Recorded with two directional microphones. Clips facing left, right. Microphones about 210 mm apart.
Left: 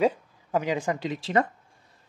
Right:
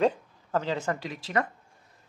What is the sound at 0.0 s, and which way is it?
Speech, 10° left (ahead or behind).